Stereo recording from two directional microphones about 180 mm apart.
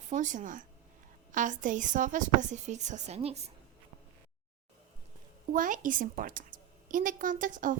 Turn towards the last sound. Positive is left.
turn(degrees=-45)  # may be behind; listen again after turning